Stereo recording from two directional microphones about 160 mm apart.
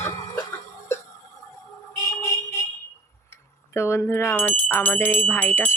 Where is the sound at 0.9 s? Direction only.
15° left (ahead or behind).